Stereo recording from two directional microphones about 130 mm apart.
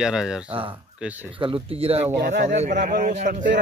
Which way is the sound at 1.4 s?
45° right (ahead or behind).